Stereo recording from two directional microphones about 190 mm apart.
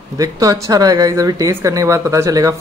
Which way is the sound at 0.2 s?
20° right (ahead or behind).